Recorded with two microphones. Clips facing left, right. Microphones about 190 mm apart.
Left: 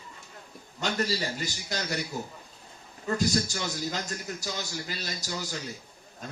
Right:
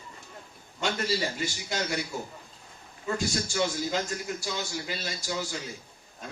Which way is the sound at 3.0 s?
40° left (ahead or behind).